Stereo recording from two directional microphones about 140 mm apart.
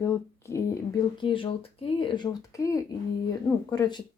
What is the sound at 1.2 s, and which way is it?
Speech, 40° left (ahead or behind).